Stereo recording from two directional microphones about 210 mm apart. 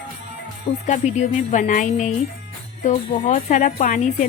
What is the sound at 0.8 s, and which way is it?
A woman's voice, 35° left (ahead or behind).